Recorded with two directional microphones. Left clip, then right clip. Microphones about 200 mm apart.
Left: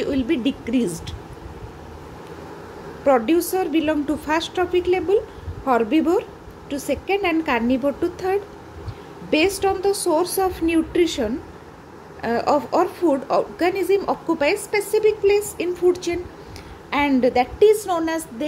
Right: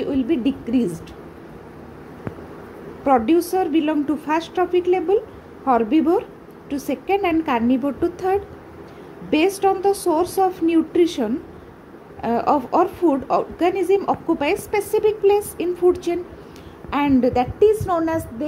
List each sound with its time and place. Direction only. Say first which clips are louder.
0.0 s speech: right 1 dB; 5° left (ahead or behind)
3.1 s a woman's voice: right 1 dB; 5° right (ahead or behind)